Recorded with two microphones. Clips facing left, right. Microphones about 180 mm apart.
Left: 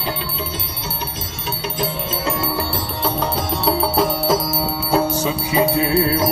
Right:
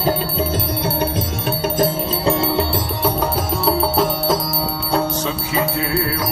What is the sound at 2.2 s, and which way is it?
Music, 25° right (ahead or behind).